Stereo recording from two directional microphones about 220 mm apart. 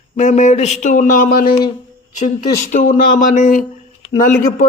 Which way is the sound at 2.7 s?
35° left (ahead or behind).